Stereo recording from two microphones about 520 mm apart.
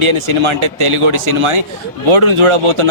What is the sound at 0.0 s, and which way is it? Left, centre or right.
Speech, right.